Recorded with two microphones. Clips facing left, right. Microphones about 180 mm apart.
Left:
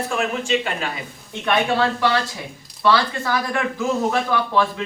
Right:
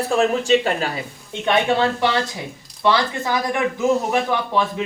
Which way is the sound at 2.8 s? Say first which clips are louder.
Even; 20° right (ahead or behind).